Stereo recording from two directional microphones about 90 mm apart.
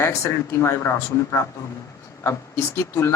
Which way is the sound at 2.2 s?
30° left (ahead or behind).